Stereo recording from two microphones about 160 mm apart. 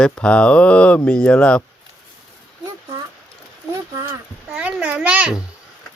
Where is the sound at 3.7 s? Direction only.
15° right (ahead or behind).